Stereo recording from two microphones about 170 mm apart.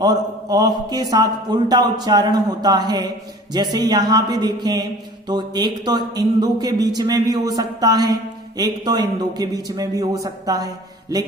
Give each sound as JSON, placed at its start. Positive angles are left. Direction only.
{"t": 0.0, "sound": "speech", "side_deg": -25}